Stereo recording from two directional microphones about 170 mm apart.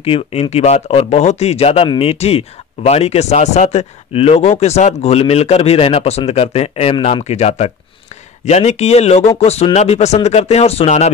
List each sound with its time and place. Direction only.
0.0 s speech: 35° left (ahead or behind)